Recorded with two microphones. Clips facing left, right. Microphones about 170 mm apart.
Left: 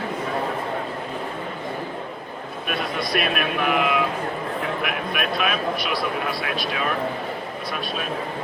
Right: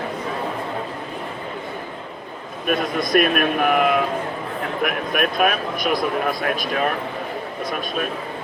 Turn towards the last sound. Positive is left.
turn(degrees=-45)  # may be behind; listen again after turning